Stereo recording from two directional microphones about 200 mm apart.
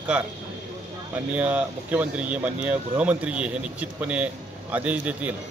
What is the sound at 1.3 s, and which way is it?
Speech, 5° right (ahead or behind).